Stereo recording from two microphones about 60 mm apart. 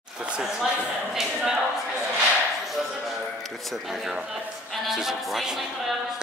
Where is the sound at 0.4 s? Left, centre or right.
Centre.